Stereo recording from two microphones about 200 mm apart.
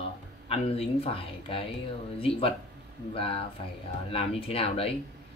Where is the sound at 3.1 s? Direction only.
30° left (ahead or behind).